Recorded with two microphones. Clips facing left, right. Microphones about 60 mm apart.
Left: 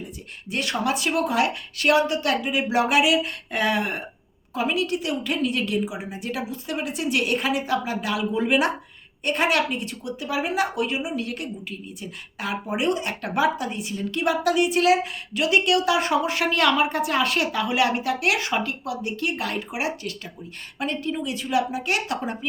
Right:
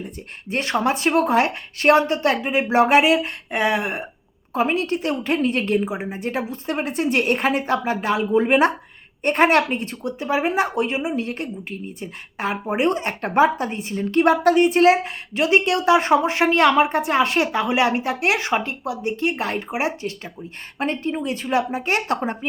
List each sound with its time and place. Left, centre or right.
0.0 s speech: right
3.5 s a sound: right
4.5 s speech: right